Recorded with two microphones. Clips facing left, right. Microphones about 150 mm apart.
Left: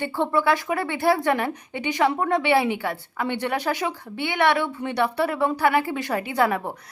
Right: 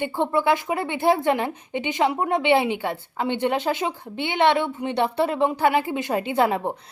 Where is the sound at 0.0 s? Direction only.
20° right (ahead or behind).